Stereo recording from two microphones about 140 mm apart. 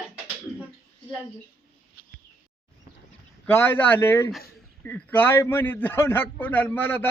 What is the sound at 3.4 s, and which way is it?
A man's voice, 15° left (ahead or behind).